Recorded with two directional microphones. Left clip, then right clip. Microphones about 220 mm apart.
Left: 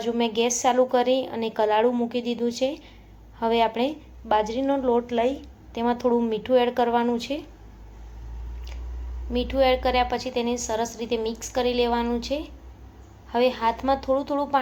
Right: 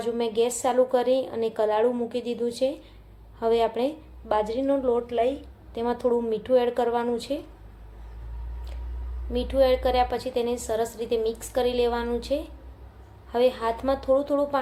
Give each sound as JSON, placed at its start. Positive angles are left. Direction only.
{"t": 0.0, "sound": "a woman's voice", "side_deg": 0}
{"t": 9.3, "sound": "a woman's voice", "side_deg": 0}